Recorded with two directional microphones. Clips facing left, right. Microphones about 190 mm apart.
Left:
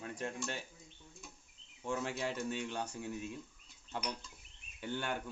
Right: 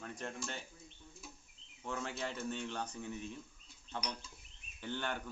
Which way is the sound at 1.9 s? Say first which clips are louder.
Left 3 dB; 15° left (ahead or behind).